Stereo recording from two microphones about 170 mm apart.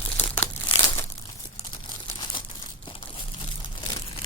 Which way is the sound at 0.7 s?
30° left (ahead or behind).